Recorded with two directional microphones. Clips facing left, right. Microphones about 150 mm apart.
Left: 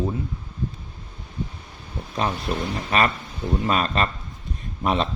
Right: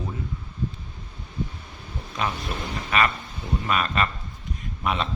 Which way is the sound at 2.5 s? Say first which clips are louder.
Left 4 dB; 35° left (ahead or behind).